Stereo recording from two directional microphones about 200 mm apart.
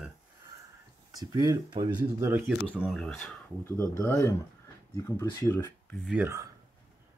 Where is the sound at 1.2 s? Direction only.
20° right (ahead or behind).